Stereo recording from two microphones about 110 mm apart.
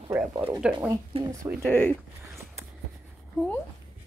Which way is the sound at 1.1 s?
60° right (ahead or behind).